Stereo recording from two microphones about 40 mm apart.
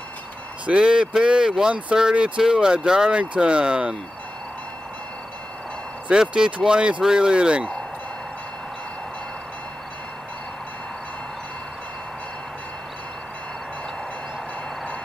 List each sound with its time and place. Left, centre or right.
0.7 s speech: right
6.3 s speech: centre